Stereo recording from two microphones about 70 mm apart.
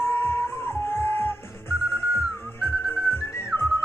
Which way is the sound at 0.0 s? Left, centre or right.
Left.